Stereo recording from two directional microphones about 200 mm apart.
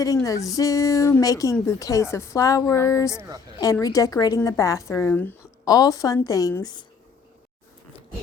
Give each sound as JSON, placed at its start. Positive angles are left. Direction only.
{"t": 0.0, "sound": "a woman's voice", "side_deg": 15}
{"t": 3.2, "sound": "a woman's voice", "side_deg": -15}
{"t": 3.6, "sound": "a woman's voice", "side_deg": 15}